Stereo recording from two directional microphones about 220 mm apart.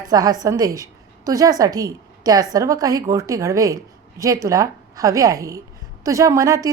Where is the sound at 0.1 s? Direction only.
15° right (ahead or behind).